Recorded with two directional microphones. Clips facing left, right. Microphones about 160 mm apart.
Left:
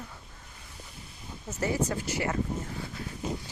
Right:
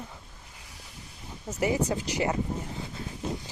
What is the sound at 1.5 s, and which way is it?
Speech, 15° right (ahead or behind).